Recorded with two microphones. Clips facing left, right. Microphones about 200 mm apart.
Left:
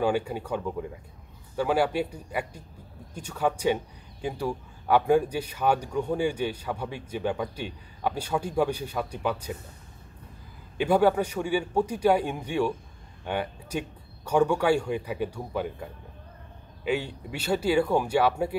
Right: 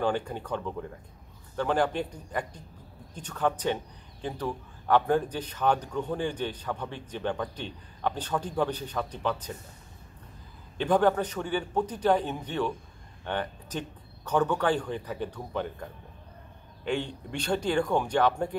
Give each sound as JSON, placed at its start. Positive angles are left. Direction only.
{"t": 0.0, "sound": "speech", "side_deg": 10}
{"t": 10.8, "sound": "speech", "side_deg": 10}